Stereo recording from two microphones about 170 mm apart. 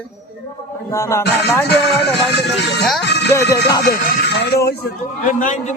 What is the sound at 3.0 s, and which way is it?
Speech, 80° left.